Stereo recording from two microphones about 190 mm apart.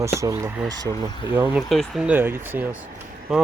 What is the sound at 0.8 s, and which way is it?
Speech, 20° left (ahead or behind).